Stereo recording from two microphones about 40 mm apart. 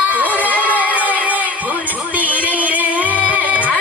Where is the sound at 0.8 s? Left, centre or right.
Right.